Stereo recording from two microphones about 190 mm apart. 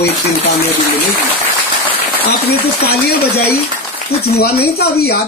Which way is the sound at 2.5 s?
55° left (ahead or behind).